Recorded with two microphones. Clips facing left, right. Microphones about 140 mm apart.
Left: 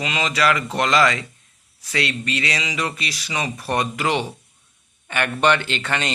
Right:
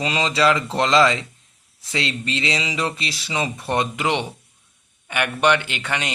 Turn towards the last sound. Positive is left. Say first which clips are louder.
# left 2 dB
turn(degrees=-15)  # may be behind; listen again after turning